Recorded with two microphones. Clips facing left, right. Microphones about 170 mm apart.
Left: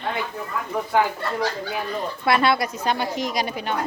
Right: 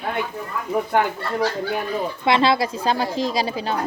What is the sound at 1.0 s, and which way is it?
Speech, 55° right (ahead or behind).